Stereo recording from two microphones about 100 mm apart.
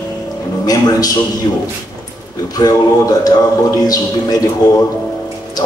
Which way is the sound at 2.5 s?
35° left (ahead or behind).